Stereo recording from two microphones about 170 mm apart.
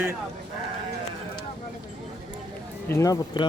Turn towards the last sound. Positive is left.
turn(degrees=20)  # may be behind; listen again after turning